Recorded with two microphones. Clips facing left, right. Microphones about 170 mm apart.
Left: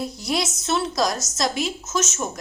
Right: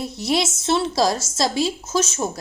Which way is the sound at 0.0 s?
25° right (ahead or behind).